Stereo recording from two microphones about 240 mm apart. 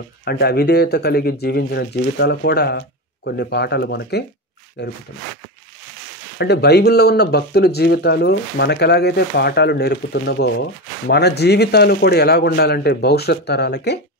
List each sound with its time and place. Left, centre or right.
0.2 s speech: left
6.3 s speech: left